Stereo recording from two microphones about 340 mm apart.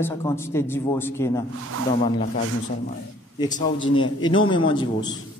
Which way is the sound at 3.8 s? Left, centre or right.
Left.